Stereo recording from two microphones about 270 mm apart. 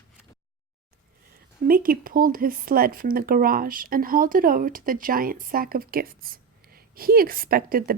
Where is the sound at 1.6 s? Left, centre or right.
Right.